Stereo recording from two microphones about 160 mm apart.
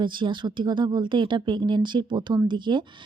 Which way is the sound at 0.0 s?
30° right (ahead or behind).